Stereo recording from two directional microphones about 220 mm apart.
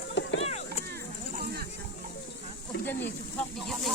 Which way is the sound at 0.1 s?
55° left (ahead or behind).